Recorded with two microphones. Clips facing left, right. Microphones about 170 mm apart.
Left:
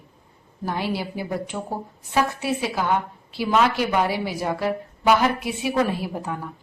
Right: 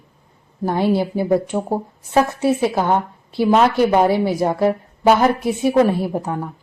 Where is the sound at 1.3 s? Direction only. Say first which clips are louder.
Right 10 dB; 40° right (ahead or behind).